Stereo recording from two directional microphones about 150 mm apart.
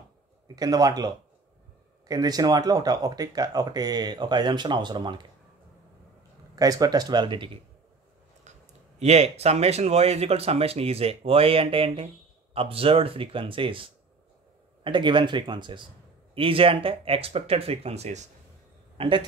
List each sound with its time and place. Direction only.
0.6 s speech: 25° right (ahead or behind)
6.5 s speech: 25° right (ahead or behind)
9.0 s speech: 45° right (ahead or behind)
18.9 s speech: 35° right (ahead or behind)